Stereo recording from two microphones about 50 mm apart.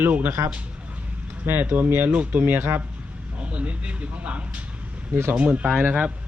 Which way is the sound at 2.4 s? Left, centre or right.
Right.